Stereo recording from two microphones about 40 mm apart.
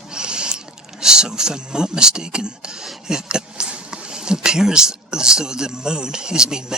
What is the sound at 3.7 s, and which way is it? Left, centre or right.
Speech, right.